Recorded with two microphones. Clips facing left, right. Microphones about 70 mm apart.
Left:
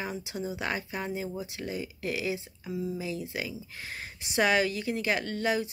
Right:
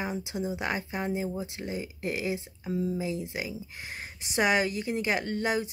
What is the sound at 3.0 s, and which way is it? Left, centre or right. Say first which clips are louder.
A woman's voice: right 2 dB; right.